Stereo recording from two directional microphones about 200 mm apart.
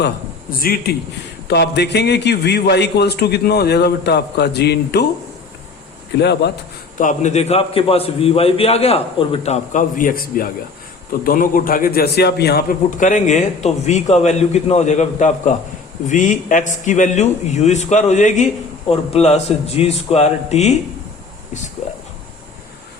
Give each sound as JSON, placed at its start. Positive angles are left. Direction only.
{"t": 0.6, "sound": "a man's voice", "side_deg": 50}
{"t": 6.1, "sound": "a man's voice", "side_deg": 55}
{"t": 7.0, "sound": "a man's voice", "side_deg": 35}